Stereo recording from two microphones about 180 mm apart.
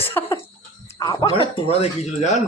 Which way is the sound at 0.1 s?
10° left (ahead or behind).